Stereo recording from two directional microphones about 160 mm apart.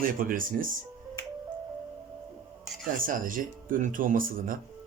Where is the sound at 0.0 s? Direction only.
60° right (ahead or behind).